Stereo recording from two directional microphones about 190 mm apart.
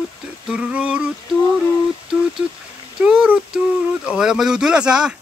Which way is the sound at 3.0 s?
5° right (ahead or behind).